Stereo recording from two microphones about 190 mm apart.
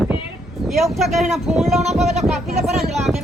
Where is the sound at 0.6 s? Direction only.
Centre (ahead or behind).